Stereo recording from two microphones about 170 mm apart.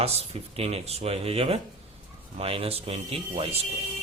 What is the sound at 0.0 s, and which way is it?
A man's voice, 35° right (ahead or behind).